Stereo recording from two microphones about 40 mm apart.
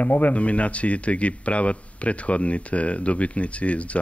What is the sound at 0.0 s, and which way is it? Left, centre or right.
Speech, left.